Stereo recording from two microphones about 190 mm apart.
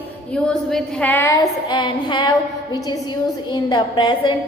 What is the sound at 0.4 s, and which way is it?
A woman's voice, 5° left (ahead or behind).